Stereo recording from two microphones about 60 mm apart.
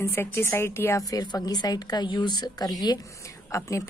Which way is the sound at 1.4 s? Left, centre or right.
Left.